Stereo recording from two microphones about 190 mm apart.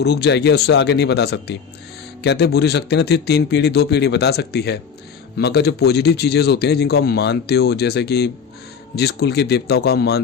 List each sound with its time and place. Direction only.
0.0 s a man's voice: 60° left (ahead or behind)